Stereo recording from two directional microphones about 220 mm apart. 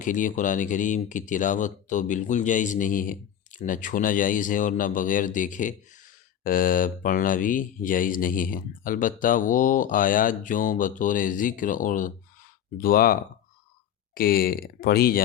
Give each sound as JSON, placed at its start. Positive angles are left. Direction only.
{"t": 0.0, "sound": "speech", "side_deg": 35}
{"t": 14.2, "sound": "speech", "side_deg": 40}